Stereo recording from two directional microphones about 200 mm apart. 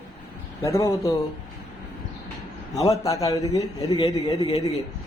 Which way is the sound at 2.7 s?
15° left (ahead or behind).